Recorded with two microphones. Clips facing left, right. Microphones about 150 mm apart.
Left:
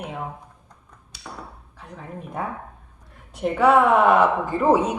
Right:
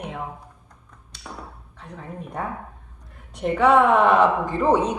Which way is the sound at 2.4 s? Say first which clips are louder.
Left 1 dB; 5° left (ahead or behind).